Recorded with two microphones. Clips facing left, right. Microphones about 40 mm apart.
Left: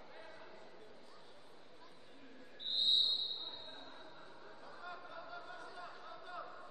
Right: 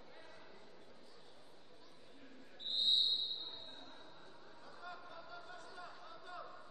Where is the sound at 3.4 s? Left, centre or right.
Centre.